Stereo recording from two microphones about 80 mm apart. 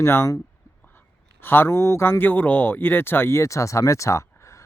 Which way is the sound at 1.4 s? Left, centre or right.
Left.